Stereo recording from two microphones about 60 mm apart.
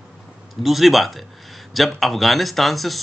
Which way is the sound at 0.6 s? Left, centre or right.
Centre.